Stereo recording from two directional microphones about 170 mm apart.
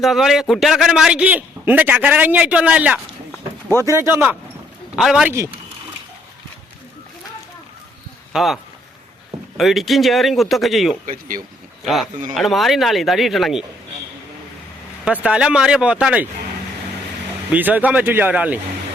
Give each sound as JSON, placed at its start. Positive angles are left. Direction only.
{"t": 0.0, "sound": "a man's voice", "side_deg": 0}
{"t": 8.3, "sound": "speech", "side_deg": 0}
{"t": 9.6, "sound": "speech", "side_deg": 0}
{"t": 11.0, "sound": "speech", "side_deg": -55}
{"t": 11.9, "sound": "speech", "side_deg": 0}
{"t": 15.0, "sound": "speech", "side_deg": -5}
{"t": 17.5, "sound": "a man's voice", "side_deg": -10}